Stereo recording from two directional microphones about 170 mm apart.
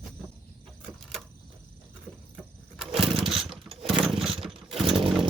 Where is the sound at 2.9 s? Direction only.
35° right (ahead or behind).